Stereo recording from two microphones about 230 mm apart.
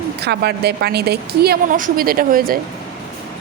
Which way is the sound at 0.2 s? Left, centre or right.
Right.